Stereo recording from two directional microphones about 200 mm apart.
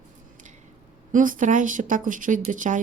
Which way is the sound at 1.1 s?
40° right (ahead or behind).